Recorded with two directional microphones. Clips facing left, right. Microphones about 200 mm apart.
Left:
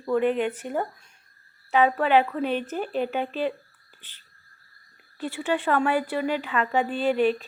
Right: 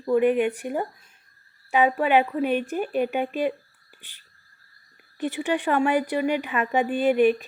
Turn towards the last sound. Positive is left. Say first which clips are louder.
# right 3 dB
turn(degrees=-15)  # may be behind; listen again after turning